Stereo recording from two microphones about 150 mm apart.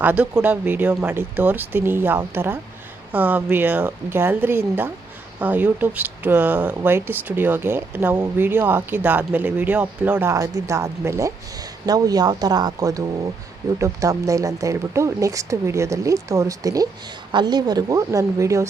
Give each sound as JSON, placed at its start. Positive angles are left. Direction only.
{"t": 0.0, "sound": "speech", "side_deg": -10}